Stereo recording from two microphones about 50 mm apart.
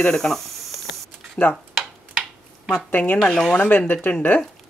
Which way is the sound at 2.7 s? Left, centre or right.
Left.